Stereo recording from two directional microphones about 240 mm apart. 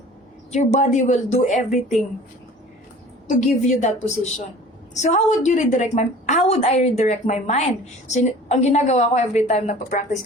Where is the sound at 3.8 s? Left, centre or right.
Left.